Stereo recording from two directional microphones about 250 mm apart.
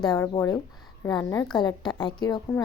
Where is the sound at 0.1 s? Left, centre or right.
Centre.